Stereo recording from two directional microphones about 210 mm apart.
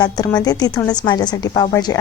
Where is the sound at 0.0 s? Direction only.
20° left (ahead or behind).